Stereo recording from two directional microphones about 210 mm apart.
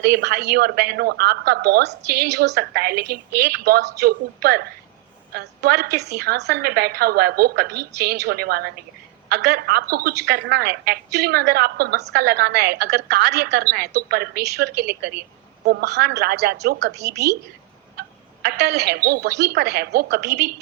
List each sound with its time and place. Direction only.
0.0 s a woman's voice: 50° right (ahead or behind)
18.4 s a woman's voice: 50° right (ahead or behind)